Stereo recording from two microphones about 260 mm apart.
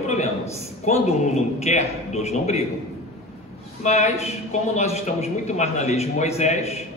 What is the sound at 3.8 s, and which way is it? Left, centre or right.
A man's voice, left.